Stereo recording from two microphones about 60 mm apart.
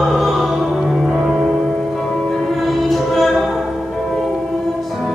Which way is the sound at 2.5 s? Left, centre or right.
Centre.